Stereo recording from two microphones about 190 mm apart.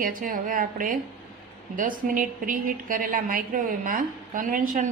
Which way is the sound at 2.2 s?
45° right (ahead or behind).